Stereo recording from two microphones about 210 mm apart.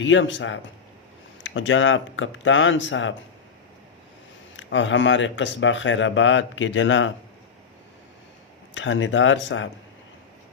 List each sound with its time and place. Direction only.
0.0 s speech: 60° left (ahead or behind)
4.5 s speech: 60° left (ahead or behind)
8.7 s speech: 65° left (ahead or behind)